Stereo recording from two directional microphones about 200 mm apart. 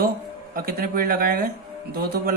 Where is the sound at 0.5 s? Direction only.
45° right (ahead or behind).